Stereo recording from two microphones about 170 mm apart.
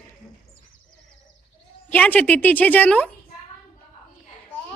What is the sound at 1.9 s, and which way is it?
A woman's voice, 10° left (ahead or behind).